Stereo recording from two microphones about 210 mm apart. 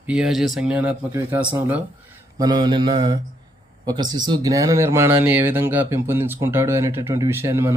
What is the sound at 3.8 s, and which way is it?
Speech, 20° right (ahead or behind).